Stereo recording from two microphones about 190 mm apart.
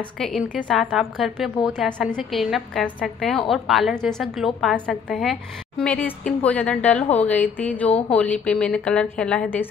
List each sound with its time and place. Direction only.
0.2 s a woman's voice: centre (ahead or behind)